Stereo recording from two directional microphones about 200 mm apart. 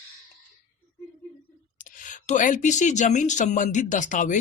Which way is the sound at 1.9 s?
40° left (ahead or behind).